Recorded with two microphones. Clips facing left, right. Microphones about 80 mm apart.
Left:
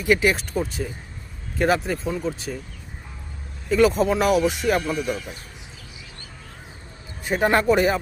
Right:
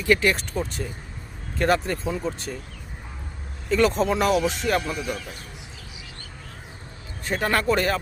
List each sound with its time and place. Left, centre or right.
0.0 s speech: centre
3.7 s speech: centre
7.3 s speech: centre